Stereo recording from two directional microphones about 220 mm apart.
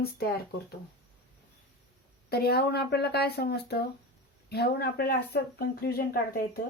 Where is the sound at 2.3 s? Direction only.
45° left (ahead or behind).